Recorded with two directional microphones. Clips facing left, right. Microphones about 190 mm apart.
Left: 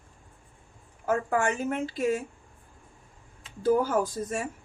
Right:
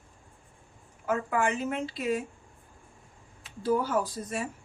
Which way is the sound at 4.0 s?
45° left (ahead or behind).